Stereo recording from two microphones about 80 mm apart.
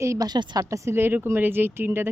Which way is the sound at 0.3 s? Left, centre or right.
Right.